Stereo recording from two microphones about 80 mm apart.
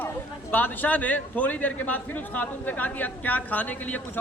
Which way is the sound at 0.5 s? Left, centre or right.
Left.